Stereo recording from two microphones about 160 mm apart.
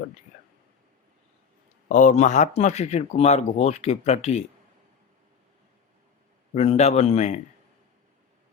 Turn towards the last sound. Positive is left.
turn(degrees=45)  # may be behind; listen again after turning